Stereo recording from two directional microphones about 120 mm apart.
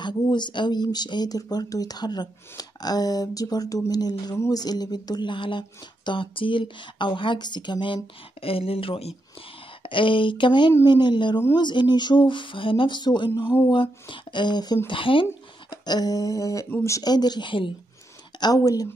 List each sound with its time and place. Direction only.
0.0 s speech: 40° left (ahead or behind)
15.7 s speech: 35° left (ahead or behind)
18.4 s speech: 30° left (ahead or behind)